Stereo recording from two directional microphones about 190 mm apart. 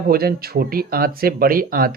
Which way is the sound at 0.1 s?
55° right (ahead or behind).